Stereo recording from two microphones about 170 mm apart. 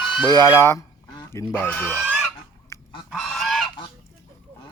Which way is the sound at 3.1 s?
Centre (ahead or behind).